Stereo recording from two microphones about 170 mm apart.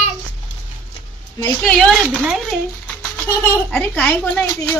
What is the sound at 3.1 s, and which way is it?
Speech, 10° left (ahead or behind).